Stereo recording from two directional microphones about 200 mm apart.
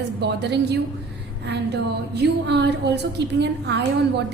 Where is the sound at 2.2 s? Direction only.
60° right (ahead or behind).